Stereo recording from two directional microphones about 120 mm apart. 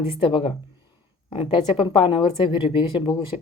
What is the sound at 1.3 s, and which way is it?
A woman's voice, 50° left (ahead or behind).